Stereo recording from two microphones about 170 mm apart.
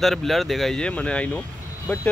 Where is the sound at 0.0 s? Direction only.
Centre (ahead or behind).